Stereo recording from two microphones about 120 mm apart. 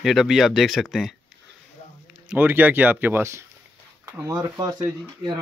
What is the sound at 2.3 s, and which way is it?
Speech, 15° right (ahead or behind).